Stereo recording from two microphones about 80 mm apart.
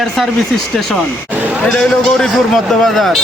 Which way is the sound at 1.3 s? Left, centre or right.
Centre.